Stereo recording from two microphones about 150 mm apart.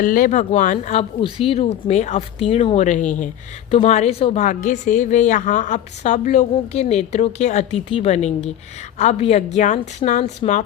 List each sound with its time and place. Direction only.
0.0 s speech: 65° left (ahead or behind)
1.2 s a woman's voice: 40° left (ahead or behind); by 2.2 s 55° left (ahead or behind)
2.4 s a woman's voice: 40° left (ahead or behind)
4.4 s a woman's voice: 60° left (ahead or behind)